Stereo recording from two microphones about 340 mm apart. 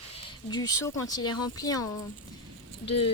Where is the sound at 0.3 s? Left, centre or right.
Centre.